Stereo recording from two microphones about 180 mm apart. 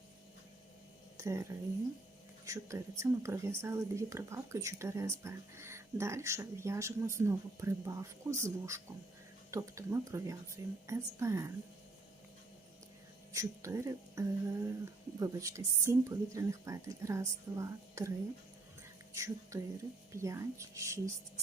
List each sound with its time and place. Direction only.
1.1 s speech: 15° right (ahead or behind)
13.3 s speech: 15° right (ahead or behind)
19.1 s speech: 15° right (ahead or behind)